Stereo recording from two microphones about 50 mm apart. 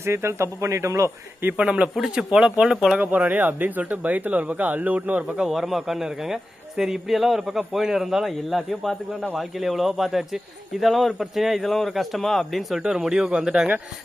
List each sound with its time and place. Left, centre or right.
0.0 s speech: right
0.6 s speech: right
1.5 s speech: right
3.0 s speech: right
5.4 s a man's voice: centre
13.0 s speech: centre